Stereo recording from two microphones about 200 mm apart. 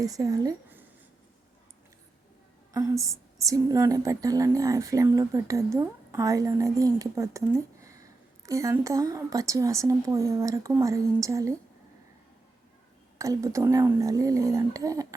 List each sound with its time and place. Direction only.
0.0 s speech: 20° right (ahead or behind)
2.7 s speech: 15° right (ahead or behind)
13.1 s speech: 15° right (ahead or behind)